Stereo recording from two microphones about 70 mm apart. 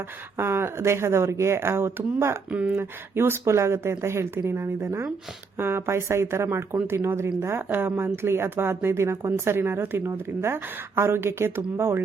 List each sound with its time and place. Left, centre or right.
0.3 s a woman's voice: right
2.5 s speech: right
2.7 s a woman's voice: right